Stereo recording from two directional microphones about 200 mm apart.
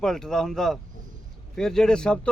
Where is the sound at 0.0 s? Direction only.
Centre (ahead or behind).